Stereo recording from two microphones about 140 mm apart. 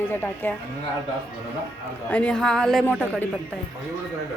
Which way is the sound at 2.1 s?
10° left (ahead or behind).